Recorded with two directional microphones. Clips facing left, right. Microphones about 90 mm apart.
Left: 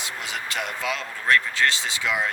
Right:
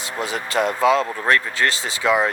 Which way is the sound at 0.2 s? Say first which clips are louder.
Right 11 dB; 35° right (ahead or behind).